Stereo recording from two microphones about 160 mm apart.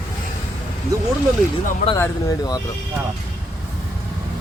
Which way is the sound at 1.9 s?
20° left (ahead or behind).